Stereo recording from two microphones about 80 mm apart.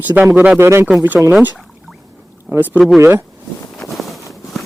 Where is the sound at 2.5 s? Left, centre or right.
Centre.